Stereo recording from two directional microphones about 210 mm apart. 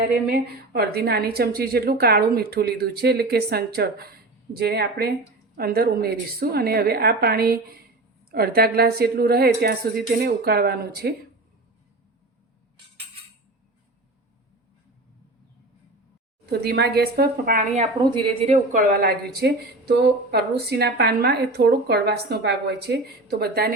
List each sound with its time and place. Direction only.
0.3 s a woman's voice: 45° right (ahead or behind)
16.5 s a woman's voice: 50° right (ahead or behind)
18.0 s a woman's voice: 20° right (ahead or behind); by 23.7 s 50° right (ahead or behind)